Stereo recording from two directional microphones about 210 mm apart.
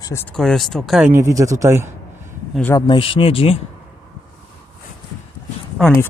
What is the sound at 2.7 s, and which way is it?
Speech, 20° left (ahead or behind).